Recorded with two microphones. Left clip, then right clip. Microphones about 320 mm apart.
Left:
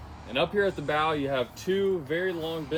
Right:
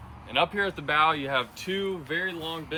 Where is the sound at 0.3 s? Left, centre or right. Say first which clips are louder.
Even; right.